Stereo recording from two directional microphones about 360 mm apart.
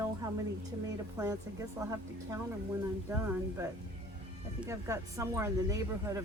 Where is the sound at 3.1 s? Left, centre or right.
Centre.